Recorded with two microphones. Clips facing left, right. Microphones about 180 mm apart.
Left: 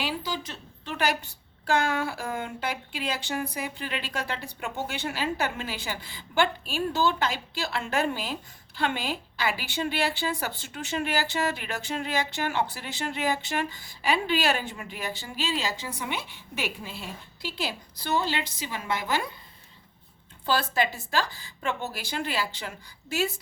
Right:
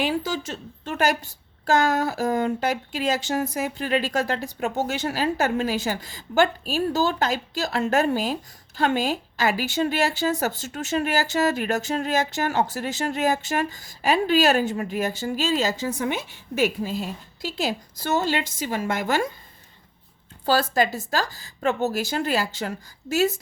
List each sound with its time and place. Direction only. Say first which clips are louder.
0.0 s a woman's voice: right 7 dB; 45° right (ahead or behind)
20.4 s a woman's voice: right 5 dB; 40° right (ahead or behind)